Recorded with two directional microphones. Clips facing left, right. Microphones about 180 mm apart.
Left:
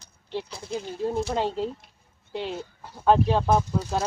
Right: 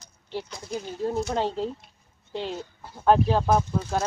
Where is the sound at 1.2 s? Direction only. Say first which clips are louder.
Even; 10° left (ahead or behind).